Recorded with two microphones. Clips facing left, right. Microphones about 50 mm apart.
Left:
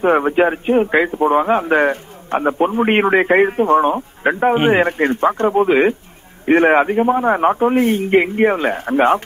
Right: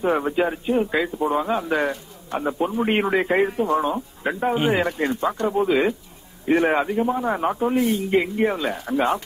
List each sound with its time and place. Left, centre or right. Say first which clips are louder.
0.0 s speech: left 7 dB; left